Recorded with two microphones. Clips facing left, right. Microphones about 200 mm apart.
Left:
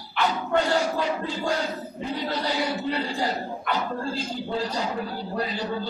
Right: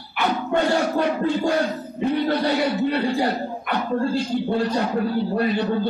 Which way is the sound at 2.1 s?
60° right (ahead or behind).